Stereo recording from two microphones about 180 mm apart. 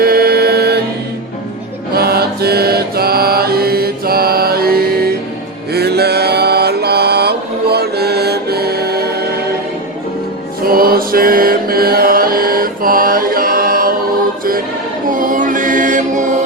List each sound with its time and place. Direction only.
0.0 s music: 55° right (ahead or behind)
1.9 s mantra: 60° right (ahead or behind)
10.7 s mantra: 55° right (ahead or behind)
15.1 s music: 50° right (ahead or behind)